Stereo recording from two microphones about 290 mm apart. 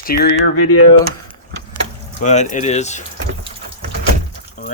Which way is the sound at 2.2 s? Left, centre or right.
Left.